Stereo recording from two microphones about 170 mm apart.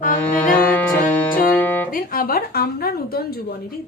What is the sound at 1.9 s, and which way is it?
A woman's voice, 55° left (ahead or behind).